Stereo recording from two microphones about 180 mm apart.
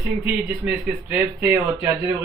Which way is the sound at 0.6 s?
10° right (ahead or behind).